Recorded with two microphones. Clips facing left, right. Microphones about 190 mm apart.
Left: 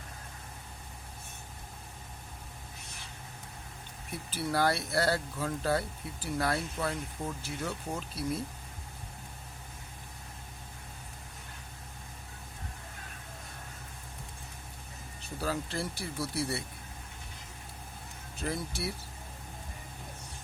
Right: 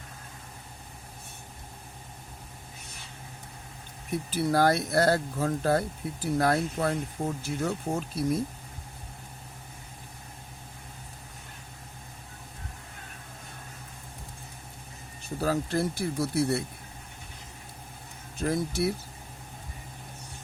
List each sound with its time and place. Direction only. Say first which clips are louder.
4.3 s speech: right 5 dB; 45° right (ahead or behind)
15.4 s speech: right 7 dB; 45° right (ahead or behind)
18.3 s speech: right 8 dB; 45° right (ahead or behind)